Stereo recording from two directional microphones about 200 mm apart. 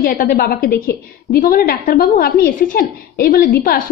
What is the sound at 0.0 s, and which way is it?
A woman's voice, 45° left (ahead or behind).